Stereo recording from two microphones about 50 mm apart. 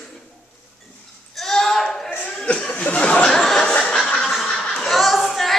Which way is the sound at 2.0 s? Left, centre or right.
Left.